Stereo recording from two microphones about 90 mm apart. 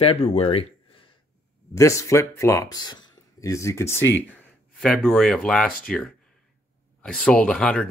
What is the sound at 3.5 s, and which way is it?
Speech, 30° left (ahead or behind).